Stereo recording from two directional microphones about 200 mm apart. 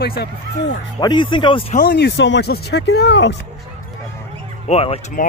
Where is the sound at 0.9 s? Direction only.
25° left (ahead or behind).